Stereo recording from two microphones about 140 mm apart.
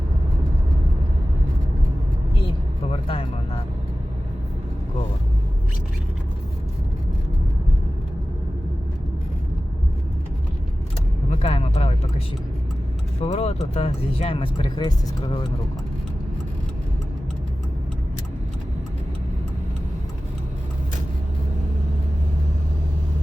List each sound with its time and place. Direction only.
2.9 s vehicle: 40° left (ahead or behind)
11.3 s a sound: 45° left (ahead or behind)
13.2 s speech: 45° left (ahead or behind)